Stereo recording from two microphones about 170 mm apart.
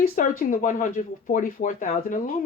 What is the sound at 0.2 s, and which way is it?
Speech, 55° left (ahead or behind).